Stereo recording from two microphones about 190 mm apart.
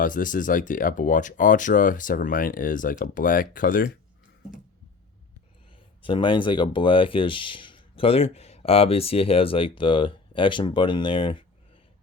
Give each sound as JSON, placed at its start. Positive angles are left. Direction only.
{"t": 0.0, "sound": "speech", "side_deg": 45}
{"t": 6.0, "sound": "speech", "side_deg": 25}